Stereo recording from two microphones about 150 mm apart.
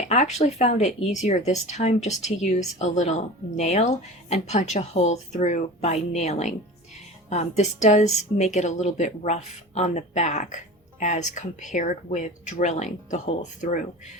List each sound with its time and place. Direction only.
0.1 s speech: 50° left (ahead or behind)